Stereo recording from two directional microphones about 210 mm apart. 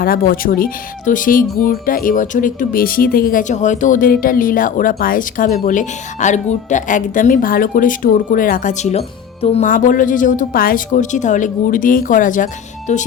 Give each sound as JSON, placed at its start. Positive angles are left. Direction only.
{"t": 0.0, "sound": "speech", "side_deg": 45}